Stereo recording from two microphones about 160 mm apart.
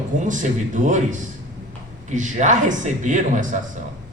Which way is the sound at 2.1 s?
50° right (ahead or behind).